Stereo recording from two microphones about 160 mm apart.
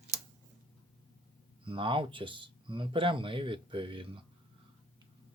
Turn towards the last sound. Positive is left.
turn(degrees=-35)  # may be behind; listen again after turning